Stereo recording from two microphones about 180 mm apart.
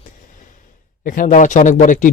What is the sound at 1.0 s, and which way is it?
Speech, 50° left (ahead or behind).